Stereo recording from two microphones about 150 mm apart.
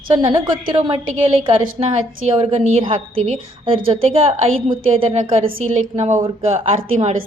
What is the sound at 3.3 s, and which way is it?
A woman's voice, 35° right (ahead or behind).